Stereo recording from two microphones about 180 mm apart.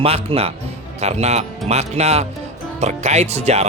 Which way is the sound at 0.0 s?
35° right (ahead or behind).